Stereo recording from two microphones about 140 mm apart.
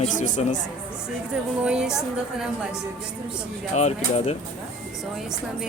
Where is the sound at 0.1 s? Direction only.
65° left (ahead or behind).